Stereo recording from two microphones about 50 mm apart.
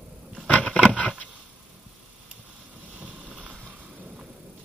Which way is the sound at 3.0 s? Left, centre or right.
Right.